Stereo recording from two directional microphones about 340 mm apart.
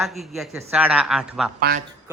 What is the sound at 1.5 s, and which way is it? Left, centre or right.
Speech, right.